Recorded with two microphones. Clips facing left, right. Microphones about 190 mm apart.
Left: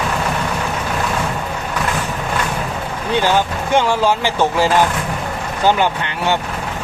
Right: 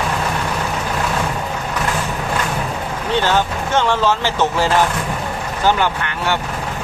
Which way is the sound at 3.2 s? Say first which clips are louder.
Left 2 dB; 15° left (ahead or behind).